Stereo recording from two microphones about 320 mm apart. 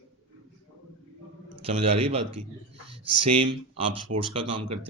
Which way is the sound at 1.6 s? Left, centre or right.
Centre.